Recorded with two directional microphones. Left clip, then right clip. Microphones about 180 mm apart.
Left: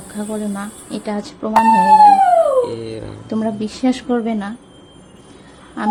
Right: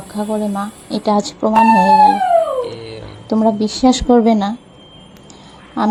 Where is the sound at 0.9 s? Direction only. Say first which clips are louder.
Right 9 dB; 20° right (ahead or behind).